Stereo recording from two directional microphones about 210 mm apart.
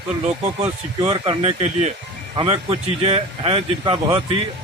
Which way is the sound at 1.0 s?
25° right (ahead or behind).